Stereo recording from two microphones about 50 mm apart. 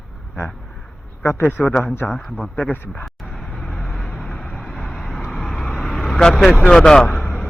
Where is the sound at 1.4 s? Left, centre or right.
Left.